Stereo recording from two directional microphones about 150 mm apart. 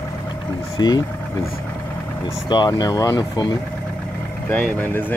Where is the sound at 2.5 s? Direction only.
30° left (ahead or behind).